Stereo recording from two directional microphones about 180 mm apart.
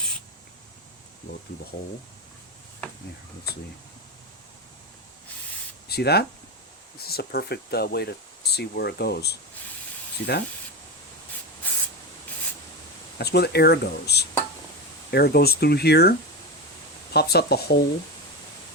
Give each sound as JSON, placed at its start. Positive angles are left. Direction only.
{"t": 5.9, "sound": "speech", "side_deg": 65}
{"t": 11.6, "sound": "spray", "side_deg": 10}
{"t": 13.1, "sound": "speech", "side_deg": 65}